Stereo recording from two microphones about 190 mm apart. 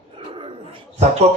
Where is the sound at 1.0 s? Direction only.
35° right (ahead or behind).